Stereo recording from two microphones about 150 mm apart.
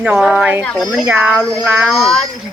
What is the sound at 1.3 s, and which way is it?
Speech, 5° left (ahead or behind).